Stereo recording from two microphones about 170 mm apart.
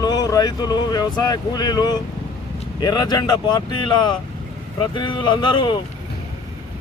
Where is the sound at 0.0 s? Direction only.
20° left (ahead or behind).